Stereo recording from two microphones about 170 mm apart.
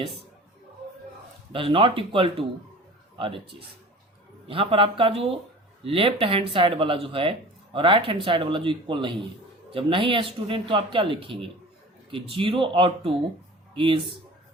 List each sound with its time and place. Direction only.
1.5 s speech: 30° right (ahead or behind)